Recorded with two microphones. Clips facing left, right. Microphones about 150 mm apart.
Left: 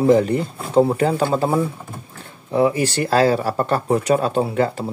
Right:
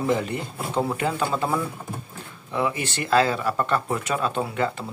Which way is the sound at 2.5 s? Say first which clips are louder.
Left 8 dB; 35° left (ahead or behind).